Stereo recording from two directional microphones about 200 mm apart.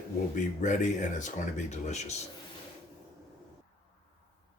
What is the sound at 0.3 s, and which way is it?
Speech, 40° left (ahead or behind).